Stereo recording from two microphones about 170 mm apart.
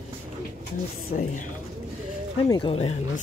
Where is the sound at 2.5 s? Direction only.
30° left (ahead or behind).